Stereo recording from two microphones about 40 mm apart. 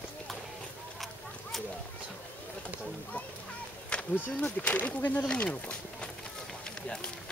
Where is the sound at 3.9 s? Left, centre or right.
Left.